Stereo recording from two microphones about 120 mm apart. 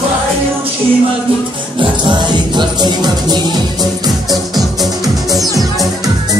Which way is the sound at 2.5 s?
35° right (ahead or behind).